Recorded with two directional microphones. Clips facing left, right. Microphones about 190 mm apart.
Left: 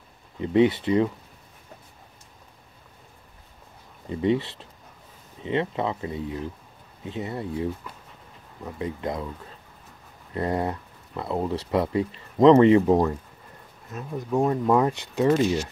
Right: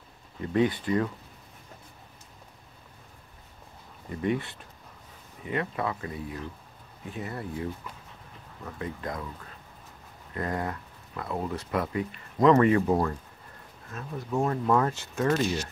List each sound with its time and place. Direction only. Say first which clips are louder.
0.4 s speech: left 6 dB; 20° left (ahead or behind)
4.1 s speech: left 5 dB; 20° left (ahead or behind)
10.3 s speech: left 5 dB; 25° left (ahead or behind)